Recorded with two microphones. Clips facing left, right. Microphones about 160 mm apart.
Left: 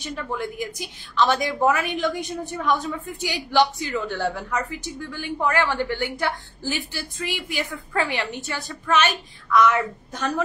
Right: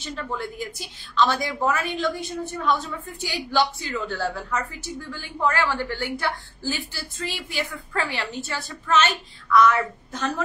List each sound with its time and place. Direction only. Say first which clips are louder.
0.0 s a woman's voice: left 2 dB; 15° left (ahead or behind)